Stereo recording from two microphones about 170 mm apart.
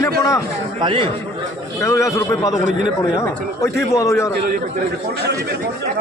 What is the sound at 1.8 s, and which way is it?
Speech, 20° left (ahead or behind).